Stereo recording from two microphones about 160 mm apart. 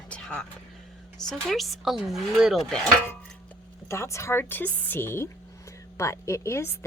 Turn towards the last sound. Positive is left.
turn(degrees=15)  # may be behind; listen again after turning